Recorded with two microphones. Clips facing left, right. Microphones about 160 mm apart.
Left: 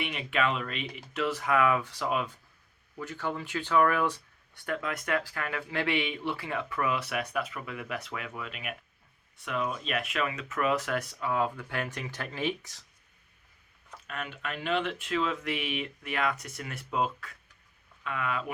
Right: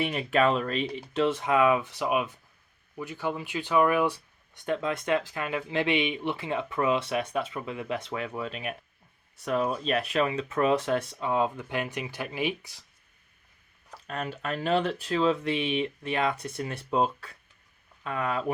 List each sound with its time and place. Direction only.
0.0 s speech: 40° right (ahead or behind); by 12.8 s 10° right (ahead or behind)
14.1 s speech: 35° right (ahead or behind)